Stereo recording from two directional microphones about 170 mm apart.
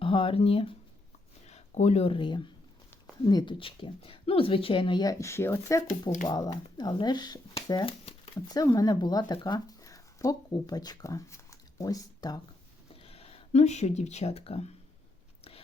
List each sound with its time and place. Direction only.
0.0 s speech: 30° left (ahead or behind); by 5.8 s 15° left (ahead or behind)
5.9 s speech: 45° left (ahead or behind)
6.2 s speech: 25° left (ahead or behind)
12.9 s speech: 35° left (ahead or behind)